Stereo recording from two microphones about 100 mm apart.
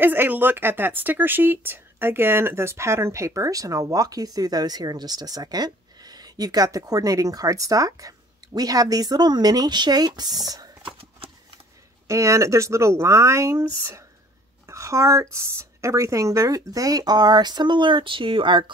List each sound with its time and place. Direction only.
0.0 s speech: 20° right (ahead or behind); by 10.8 s 40° right (ahead or behind)
10.8 s horse: 65° right (ahead or behind)
12.1 s speech: 30° right (ahead or behind)
14.7 s a sound: 30° right (ahead or behind)
15.3 s speech: 30° right (ahead or behind); by 18.7 s 55° right (ahead or behind)